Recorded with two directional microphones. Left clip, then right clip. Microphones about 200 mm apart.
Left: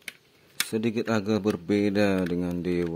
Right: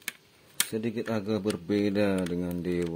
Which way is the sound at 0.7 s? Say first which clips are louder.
Left 7 dB; 20° left (ahead or behind).